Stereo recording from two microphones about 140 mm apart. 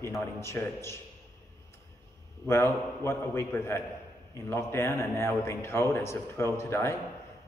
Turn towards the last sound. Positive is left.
turn(degrees=20)  # may be behind; listen again after turning